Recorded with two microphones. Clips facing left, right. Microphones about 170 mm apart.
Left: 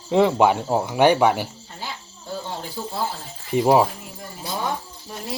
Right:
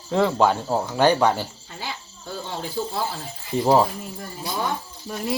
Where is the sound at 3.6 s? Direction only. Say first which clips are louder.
Left 1 dB; 10° left (ahead or behind).